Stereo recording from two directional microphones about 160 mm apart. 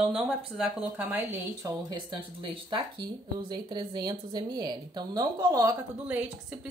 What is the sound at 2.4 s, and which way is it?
Speech, 30° right (ahead or behind).